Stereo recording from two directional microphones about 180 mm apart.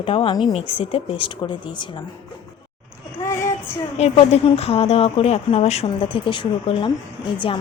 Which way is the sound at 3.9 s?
35° left (ahead or behind).